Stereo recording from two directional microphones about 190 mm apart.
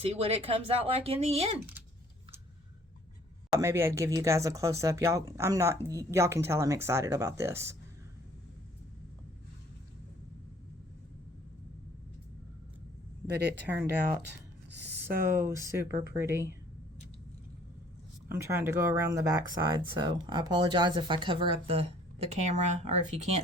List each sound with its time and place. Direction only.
0.0 s speech: 35° right (ahead or behind)
3.6 s speech: 15° right (ahead or behind)
13.3 s speech: 60° right (ahead or behind)
14.8 s a sound: 10° right (ahead or behind)
15.3 s speech: 15° right (ahead or behind)
18.3 s speech: 15° right (ahead or behind); by 23.4 s 35° right (ahead or behind)